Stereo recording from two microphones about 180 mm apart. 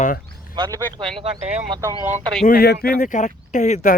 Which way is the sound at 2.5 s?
55° left (ahead or behind).